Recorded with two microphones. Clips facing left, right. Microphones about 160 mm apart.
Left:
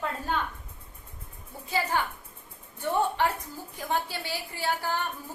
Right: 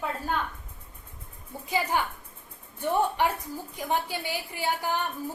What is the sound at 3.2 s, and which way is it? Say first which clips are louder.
A woman's voice: right 1 dB; 15° right (ahead or behind).